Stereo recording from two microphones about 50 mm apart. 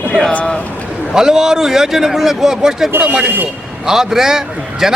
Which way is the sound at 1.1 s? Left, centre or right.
Centre.